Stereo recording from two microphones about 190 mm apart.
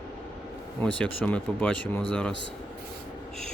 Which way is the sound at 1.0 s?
5° left (ahead or behind).